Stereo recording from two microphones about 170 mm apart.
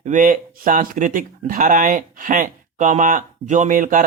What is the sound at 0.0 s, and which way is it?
Speech, 50° right (ahead or behind).